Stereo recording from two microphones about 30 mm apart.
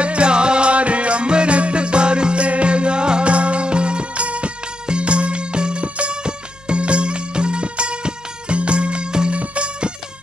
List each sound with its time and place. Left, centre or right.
0.0 s music: right